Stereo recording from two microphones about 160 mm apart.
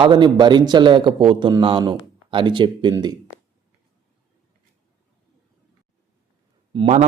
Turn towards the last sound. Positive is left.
turn(degrees=-45)  # may be behind; listen again after turning